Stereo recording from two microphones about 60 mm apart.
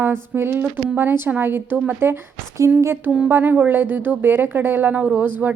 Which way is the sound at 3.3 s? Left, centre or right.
Right.